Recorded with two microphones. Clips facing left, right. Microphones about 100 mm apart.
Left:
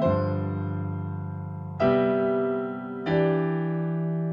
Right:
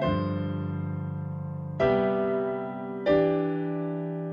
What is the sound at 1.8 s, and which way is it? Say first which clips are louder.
Music: left 2 dB; 65° left (ahead or behind).